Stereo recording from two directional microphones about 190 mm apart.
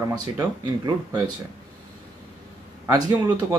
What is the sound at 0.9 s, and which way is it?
Speech, 20° right (ahead or behind).